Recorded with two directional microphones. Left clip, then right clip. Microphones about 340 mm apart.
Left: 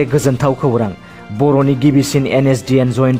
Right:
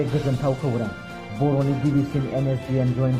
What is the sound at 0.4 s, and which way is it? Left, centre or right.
Speech, left.